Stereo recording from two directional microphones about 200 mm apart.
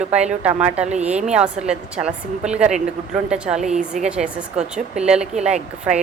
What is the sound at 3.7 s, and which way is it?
Speech, 35° right (ahead or behind).